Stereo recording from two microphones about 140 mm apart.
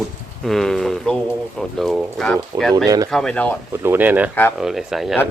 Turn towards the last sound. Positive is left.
turn(degrees=0)  # may be behind; listen again after turning